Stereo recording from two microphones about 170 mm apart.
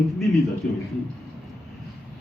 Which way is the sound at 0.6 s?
60° left (ahead or behind).